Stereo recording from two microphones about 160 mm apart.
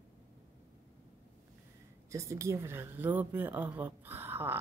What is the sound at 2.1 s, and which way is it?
A woman's voice, 20° right (ahead or behind).